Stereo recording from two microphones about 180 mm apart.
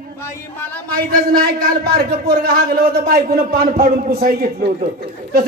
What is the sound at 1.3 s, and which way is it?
Speech, 55° right (ahead or behind).